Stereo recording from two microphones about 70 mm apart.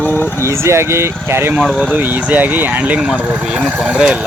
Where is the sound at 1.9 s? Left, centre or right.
Right.